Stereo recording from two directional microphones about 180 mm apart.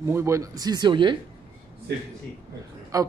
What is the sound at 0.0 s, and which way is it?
Speech, 15° right (ahead or behind).